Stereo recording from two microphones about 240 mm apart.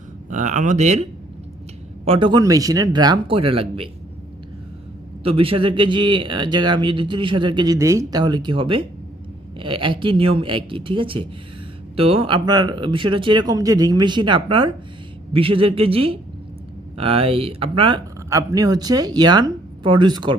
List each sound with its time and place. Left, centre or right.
0.3 s speech: right
2.0 s speech: right
5.2 s a man's voice: right